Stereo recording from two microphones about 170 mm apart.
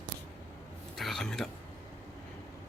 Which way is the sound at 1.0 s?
Centre (ahead or behind).